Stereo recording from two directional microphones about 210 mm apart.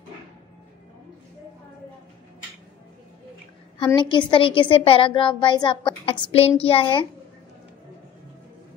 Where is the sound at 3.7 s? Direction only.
25° left (ahead or behind).